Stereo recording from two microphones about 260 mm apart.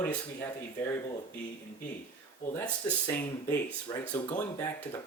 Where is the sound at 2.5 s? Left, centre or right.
Centre.